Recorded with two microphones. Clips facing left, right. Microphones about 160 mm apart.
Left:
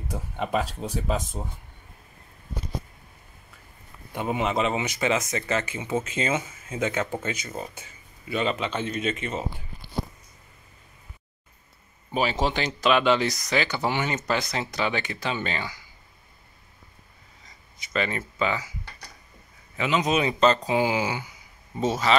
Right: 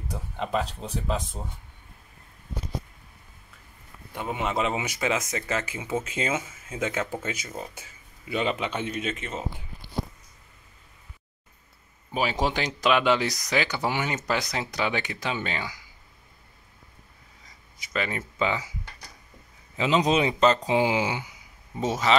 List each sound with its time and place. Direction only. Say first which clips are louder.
0.8 s a man's voice: left 4 dB; 10° left (ahead or behind)
4.1 s a man's voice: left 3 dB; 15° left (ahead or behind)
4.6 s speech: left 2 dB; 10° right (ahead or behind)
12.1 s speech: left 1 dB; 10° right (ahead or behind)
17.7 s speech: left 2 dB; 10° right (ahead or behind)
19.8 s speech: right 1 dB; 30° right (ahead or behind)